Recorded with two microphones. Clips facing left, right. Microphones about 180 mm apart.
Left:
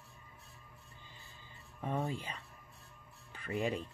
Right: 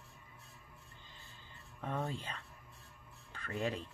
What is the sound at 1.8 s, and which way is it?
Speech, 10° left (ahead or behind).